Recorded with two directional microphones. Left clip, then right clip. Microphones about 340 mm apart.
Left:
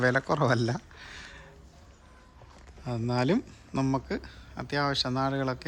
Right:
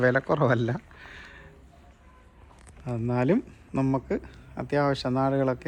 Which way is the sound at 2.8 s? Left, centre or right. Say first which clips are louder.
Right 2 dB; centre.